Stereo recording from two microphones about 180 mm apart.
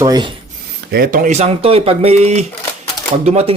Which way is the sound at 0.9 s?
55° right (ahead or behind).